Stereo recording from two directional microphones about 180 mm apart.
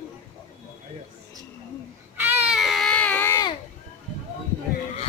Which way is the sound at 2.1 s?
10° right (ahead or behind).